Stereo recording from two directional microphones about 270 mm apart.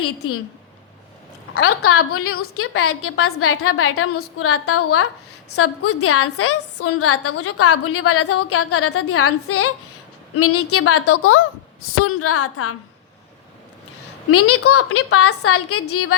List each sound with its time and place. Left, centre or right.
1.5 s a woman's voice: left
14.3 s a woman's voice: left